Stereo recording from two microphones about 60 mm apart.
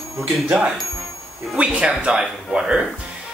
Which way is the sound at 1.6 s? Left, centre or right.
Centre.